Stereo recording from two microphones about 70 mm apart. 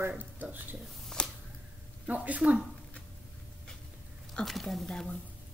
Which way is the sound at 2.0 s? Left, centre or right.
Right.